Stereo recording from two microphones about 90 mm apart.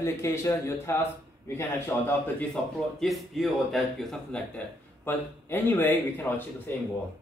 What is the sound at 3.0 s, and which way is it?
A man's voice, centre (ahead or behind).